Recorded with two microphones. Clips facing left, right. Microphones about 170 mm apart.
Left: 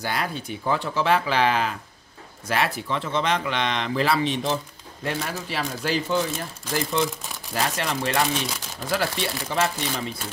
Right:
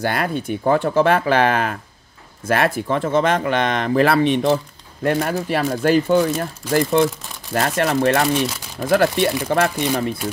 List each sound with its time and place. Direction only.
0.0 s speech: 55° right (ahead or behind)